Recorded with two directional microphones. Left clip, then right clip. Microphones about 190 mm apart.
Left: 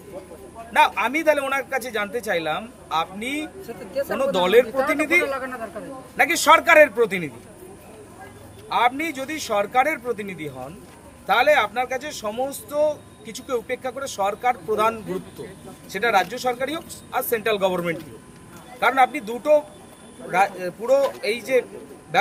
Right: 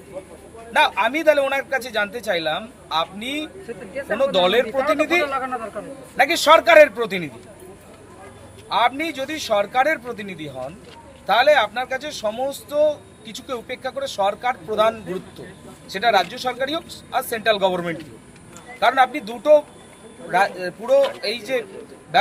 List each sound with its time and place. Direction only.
0.7 s a man's voice: 5° left (ahead or behind)
4.8 s a man's voice: 25° right (ahead or behind)
6.1 s a man's voice: 5° left (ahead or behind)
8.7 s a man's voice: 5° left (ahead or behind)